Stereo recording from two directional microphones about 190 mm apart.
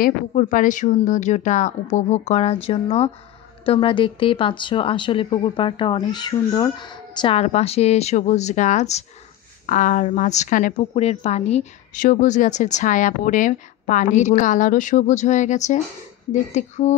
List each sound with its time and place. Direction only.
0.0 s a woman's voice: 45° left (ahead or behind)